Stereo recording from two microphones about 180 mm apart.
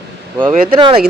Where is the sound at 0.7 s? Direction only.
30° right (ahead or behind).